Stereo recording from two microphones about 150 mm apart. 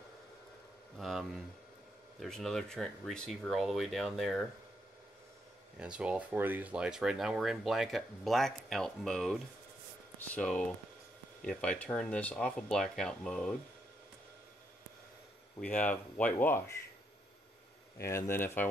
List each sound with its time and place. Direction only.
0.9 s speech: centre (ahead or behind)
5.8 s speech: 10° right (ahead or behind)
15.6 s speech: 10° left (ahead or behind)
17.9 s speech: 20° left (ahead or behind)